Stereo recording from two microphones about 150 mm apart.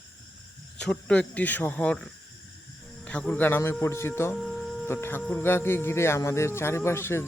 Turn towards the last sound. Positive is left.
turn(degrees=15)  # may be behind; listen again after turning